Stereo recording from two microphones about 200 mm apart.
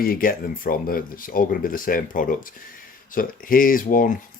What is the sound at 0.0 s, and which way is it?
Speech, 45° left (ahead or behind).